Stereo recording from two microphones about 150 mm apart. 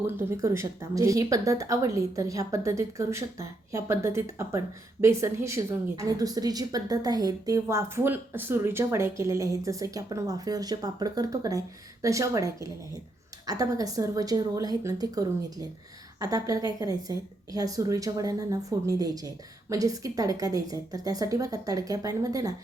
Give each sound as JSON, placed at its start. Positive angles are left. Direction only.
{"t": 0.2, "sound": "speech", "side_deg": -20}
{"t": 16.2, "sound": "speech", "side_deg": -25}